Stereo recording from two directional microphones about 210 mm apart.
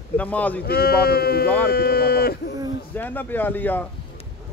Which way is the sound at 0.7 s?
50° left (ahead or behind).